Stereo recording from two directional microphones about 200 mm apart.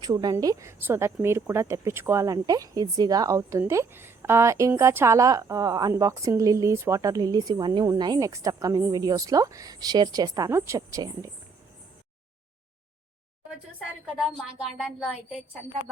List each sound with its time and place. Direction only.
0.0 s speech: 20° right (ahead or behind)
14.2 s a woman's voice: 5° right (ahead or behind)